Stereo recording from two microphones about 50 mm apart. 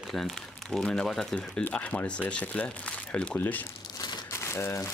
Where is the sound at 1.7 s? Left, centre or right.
Left.